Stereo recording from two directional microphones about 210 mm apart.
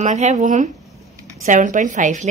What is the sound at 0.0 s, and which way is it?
A woman's voice, 30° right (ahead or behind).